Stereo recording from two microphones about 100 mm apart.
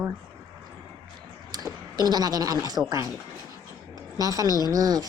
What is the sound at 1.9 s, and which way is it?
Speech, 40° right (ahead or behind).